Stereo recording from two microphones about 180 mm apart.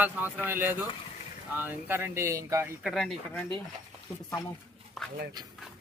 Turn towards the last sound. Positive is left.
turn(degrees=0)  # may be behind; listen again after turning